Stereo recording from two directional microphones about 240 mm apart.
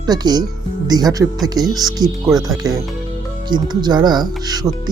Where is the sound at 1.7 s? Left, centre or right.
Centre.